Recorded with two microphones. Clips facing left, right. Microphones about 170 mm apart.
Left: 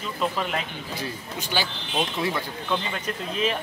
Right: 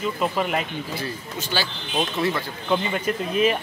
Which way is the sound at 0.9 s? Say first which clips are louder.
Right 2 dB; 15° left (ahead or behind).